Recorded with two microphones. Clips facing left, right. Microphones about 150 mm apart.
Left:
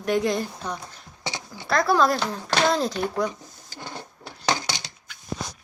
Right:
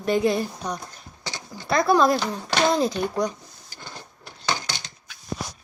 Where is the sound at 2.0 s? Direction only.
Centre (ahead or behind).